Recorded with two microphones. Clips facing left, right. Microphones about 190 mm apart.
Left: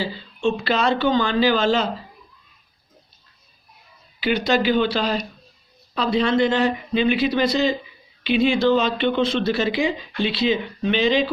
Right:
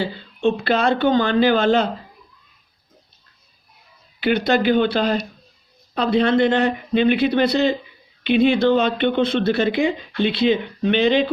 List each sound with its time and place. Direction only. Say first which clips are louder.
0.0 s speech: right 3 dB; 55° right (ahead or behind)
4.2 s speech: right 2 dB; 55° right (ahead or behind)